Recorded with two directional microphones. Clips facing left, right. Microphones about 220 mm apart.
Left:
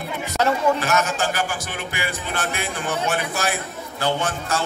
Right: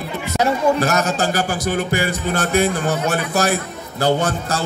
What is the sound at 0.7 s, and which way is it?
Speech, 40° right (ahead or behind).